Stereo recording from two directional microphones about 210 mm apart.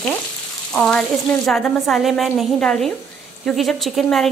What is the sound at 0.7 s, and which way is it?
A woman's voice, centre (ahead or behind).